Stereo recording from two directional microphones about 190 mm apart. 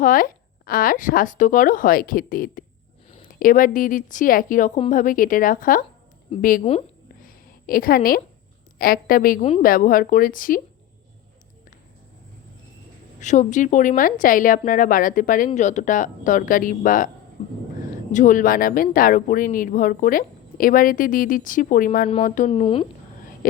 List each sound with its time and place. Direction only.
0.0 s a woman's voice: 45° left (ahead or behind)
6.6 s speech: 35° left (ahead or behind)
7.2 s a sound: 50° left (ahead or behind)
8.8 s speech: 50° left (ahead or behind)
13.1 s speech: 40° left (ahead or behind)
17.4 s speech: 30° left (ahead or behind)
18.1 s speech: 40° left (ahead or behind)